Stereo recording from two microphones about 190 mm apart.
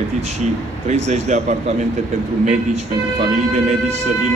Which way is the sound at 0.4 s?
35° right (ahead or behind).